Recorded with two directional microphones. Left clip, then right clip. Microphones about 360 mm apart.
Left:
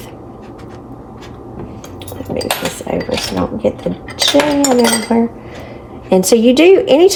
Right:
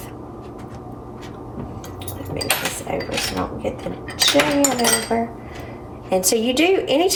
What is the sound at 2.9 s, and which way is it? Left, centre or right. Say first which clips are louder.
Speech: left 7 dB; left.